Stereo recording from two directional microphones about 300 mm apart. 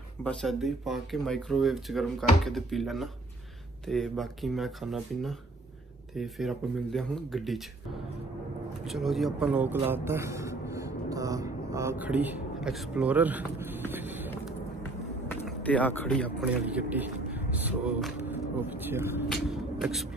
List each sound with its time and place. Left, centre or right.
0.2 s speech: centre
8.8 s a man's voice: centre
15.2 s speech: centre